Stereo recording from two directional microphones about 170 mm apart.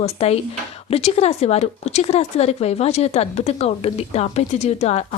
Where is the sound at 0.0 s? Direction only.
40° left (ahead or behind).